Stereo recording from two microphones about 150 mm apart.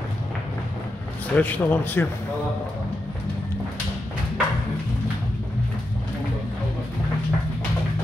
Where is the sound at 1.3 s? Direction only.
10° left (ahead or behind).